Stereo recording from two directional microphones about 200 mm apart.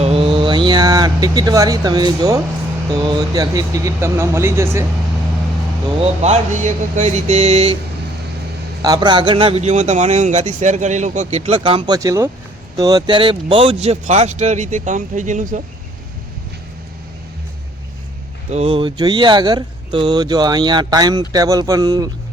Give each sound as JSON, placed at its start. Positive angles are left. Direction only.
{"t": 0.0, "sound": "a sound", "side_deg": -30}
{"t": 3.0, "sound": "speech", "side_deg": -20}
{"t": 6.0, "sound": "a man's voice", "side_deg": -35}
{"t": 8.8, "sound": "a man's voice", "side_deg": -20}
{"t": 11.9, "sound": "a man's voice", "side_deg": -15}
{"t": 18.5, "sound": "speech", "side_deg": -30}